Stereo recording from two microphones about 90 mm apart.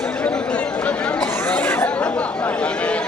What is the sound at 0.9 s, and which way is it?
Chatter, 15° left (ahead or behind).